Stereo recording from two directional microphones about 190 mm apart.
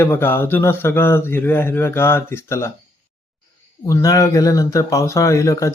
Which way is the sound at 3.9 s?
15° left (ahead or behind).